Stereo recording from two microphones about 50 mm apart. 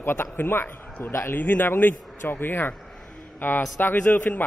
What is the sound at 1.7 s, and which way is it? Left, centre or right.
A man's voice, left.